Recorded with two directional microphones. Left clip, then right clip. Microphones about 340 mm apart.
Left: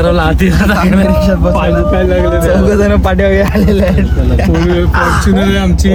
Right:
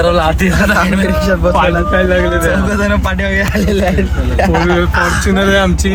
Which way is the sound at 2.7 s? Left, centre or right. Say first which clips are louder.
Left 4 dB; centre.